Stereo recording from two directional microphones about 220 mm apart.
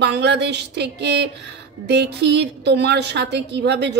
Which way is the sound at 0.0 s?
50° right (ahead or behind).